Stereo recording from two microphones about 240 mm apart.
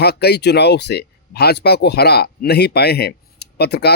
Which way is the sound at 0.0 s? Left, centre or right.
Left.